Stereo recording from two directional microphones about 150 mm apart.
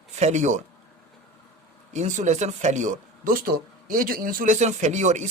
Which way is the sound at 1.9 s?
55° right (ahead or behind).